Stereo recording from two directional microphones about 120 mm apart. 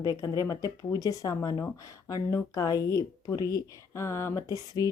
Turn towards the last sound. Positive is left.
turn(degrees=25)  # may be behind; listen again after turning